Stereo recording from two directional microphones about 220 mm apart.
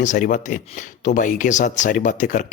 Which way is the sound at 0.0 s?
35° left (ahead or behind).